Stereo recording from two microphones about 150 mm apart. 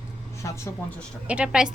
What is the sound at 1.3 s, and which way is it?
Speech, 5° right (ahead or behind).